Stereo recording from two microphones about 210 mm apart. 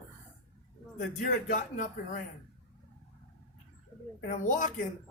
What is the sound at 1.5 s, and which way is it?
Speech, 40° left (ahead or behind).